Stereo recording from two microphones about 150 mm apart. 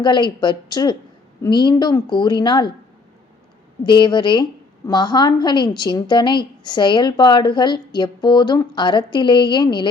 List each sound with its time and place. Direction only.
0.0 s a woman's voice: 30° left (ahead or behind)
3.8 s a woman's voice: 30° left (ahead or behind)